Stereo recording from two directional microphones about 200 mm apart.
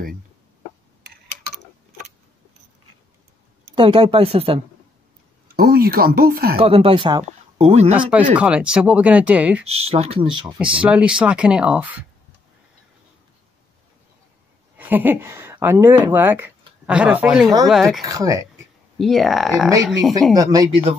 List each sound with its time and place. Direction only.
3.7 s speech: 25° right (ahead or behind)
5.6 s speech: 50° right (ahead or behind)
6.6 s speech: 30° right (ahead or behind)
7.9 s speech: 5° right (ahead or behind)
9.7 s speech: 30° right (ahead or behind)
10.6 s speech: 5° right (ahead or behind)
14.8 s speech: 10° right (ahead or behind)
18.0 s speech: 15° right (ahead or behind)
18.9 s speech: centre (ahead or behind)
19.7 s speech: 15° right (ahead or behind)